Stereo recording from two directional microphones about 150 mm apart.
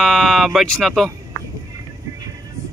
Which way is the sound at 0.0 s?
Centre (ahead or behind).